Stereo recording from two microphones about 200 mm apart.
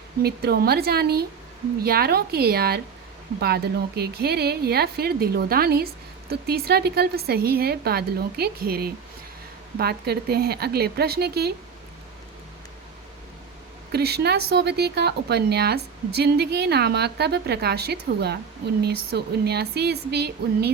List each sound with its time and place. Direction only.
0.2 s a woman's voice: 50° right (ahead or behind)
13.9 s a woman's voice: 55° right (ahead or behind)